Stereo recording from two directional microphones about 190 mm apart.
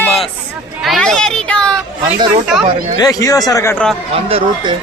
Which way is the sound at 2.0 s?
30° right (ahead or behind).